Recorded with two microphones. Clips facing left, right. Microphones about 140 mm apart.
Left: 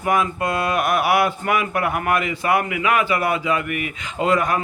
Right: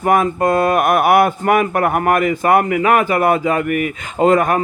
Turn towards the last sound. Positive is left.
turn(degrees=-50)  # may be behind; listen again after turning